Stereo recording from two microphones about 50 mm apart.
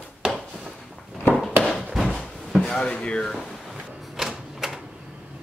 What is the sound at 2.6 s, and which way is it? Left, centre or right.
Speech, left.